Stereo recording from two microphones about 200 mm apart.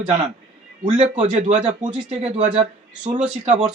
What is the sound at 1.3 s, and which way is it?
Speech, 35° right (ahead or behind).